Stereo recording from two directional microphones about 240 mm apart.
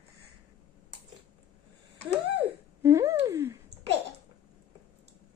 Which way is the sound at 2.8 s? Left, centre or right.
Centre.